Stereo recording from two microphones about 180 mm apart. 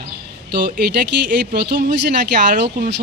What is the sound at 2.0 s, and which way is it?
Speech, 65° right (ahead or behind).